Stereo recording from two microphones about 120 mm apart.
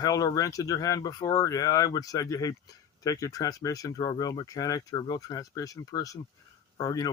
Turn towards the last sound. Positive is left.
turn(degrees=30)  # may be behind; listen again after turning